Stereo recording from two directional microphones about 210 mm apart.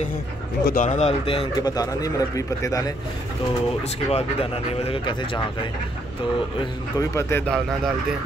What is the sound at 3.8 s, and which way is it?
Speech, 30° left (ahead or behind).